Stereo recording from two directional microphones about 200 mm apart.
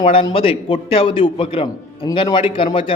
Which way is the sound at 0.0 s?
25° left (ahead or behind).